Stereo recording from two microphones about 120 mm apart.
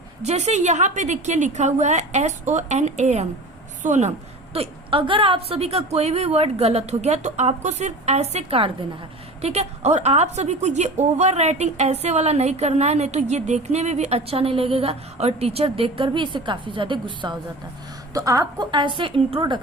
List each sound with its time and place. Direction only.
0.2 s a woman's voice: 65° right (ahead or behind)
4.5 s a woman's voice: 50° right (ahead or behind)
9.4 s a woman's voice: 65° right (ahead or behind); by 17.3 s 40° right (ahead or behind)
18.1 s a woman's voice: 30° right (ahead or behind); by 19.5 s 45° right (ahead or behind)